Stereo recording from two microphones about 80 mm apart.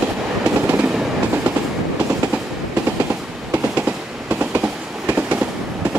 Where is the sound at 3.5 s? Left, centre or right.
Centre.